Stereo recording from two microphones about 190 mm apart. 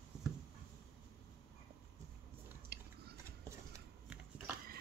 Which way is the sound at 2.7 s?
55° right (ahead or behind).